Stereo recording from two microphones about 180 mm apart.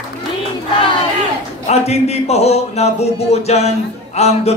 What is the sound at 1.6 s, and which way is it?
A man's voice, 35° left (ahead or behind).